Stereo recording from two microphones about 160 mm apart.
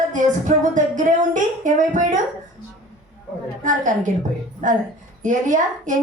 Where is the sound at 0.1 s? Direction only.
50° right (ahead or behind).